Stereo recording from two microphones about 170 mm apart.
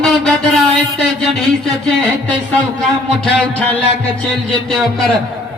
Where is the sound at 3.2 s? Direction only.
10° left (ahead or behind).